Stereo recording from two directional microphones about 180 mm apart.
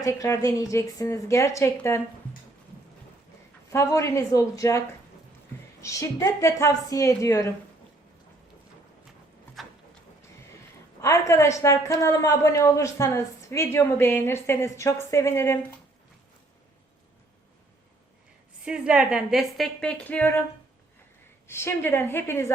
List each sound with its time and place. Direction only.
0.0 s a woman's voice: 20° left (ahead or behind)
3.7 s a woman's voice: 15° left (ahead or behind)
5.8 s a woman's voice: 15° left (ahead or behind)
11.0 s a woman's voice: 15° left (ahead or behind)
18.6 s a woman's voice: 5° right (ahead or behind)
21.4 s a woman's voice: 15° left (ahead or behind)